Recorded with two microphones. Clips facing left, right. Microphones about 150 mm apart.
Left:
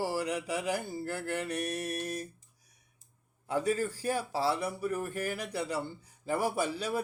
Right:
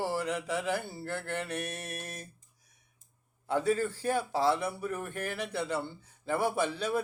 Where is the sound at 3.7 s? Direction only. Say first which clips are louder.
Right 3 dB; 40° left (ahead or behind).